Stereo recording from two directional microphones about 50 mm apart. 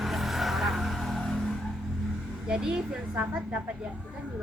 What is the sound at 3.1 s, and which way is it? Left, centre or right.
Speech, right.